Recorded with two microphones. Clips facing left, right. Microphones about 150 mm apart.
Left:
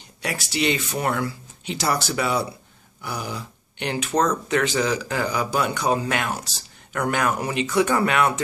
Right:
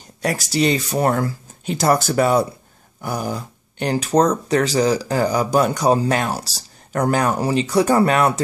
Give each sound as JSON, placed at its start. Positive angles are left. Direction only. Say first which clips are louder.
{"t": 0.2, "sound": "speech", "louder": "right 6 dB", "side_deg": -40}